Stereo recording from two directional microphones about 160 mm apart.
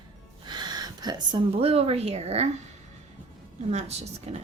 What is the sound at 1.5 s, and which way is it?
Speech, 35° right (ahead or behind).